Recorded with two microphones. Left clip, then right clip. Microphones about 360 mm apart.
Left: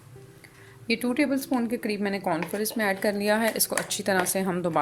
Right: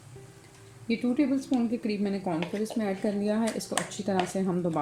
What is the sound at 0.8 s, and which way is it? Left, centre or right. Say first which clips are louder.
Speech: left 2 dB; left.